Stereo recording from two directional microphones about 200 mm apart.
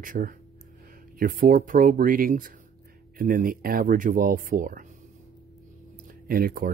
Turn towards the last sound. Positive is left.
turn(degrees=-45)  # may be behind; listen again after turning